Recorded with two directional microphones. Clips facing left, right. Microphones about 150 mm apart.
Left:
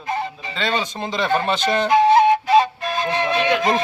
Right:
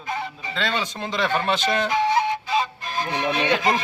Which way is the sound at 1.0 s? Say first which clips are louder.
Right 1 dB; 20° left (ahead or behind).